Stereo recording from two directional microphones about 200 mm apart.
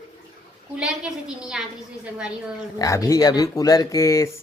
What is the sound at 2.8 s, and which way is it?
Speech, 15° left (ahead or behind).